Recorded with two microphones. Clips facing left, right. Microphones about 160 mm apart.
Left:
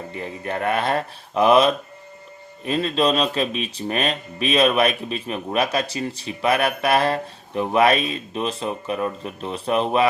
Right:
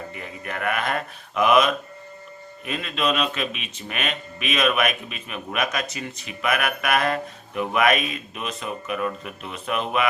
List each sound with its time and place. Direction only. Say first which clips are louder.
0.1 s speech: left 6 dB; 30° left (ahead or behind)